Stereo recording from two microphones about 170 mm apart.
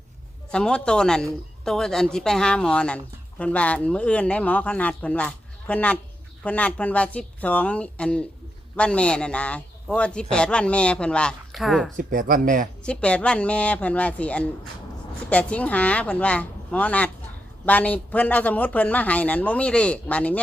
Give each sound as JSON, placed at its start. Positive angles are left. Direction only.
{"t": 0.5, "sound": "a man's voice", "side_deg": 5}
{"t": 11.9, "sound": "speech", "side_deg": -55}
{"t": 12.8, "sound": "speech", "side_deg": 5}